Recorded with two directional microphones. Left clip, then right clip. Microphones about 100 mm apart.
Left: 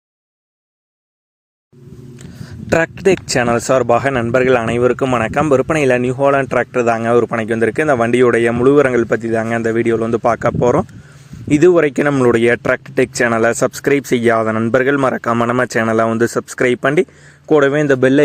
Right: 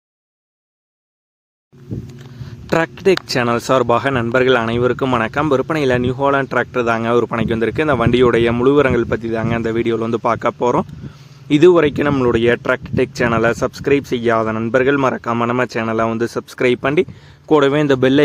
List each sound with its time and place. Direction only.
2.6 s speech: 30° left (ahead or behind); by 4.1 s 15° left (ahead or behind)
4.1 s speech: 5° left (ahead or behind)
5.3 s speech: 15° left (ahead or behind)
12.3 s speech: 35° left (ahead or behind)
16.6 s speech: 15° left (ahead or behind)